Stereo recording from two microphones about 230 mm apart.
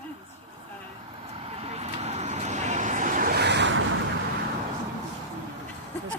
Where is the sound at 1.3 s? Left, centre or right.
Right.